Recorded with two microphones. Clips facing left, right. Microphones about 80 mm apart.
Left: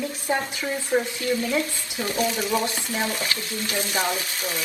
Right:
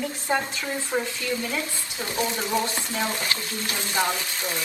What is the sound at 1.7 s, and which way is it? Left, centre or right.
Speech, right.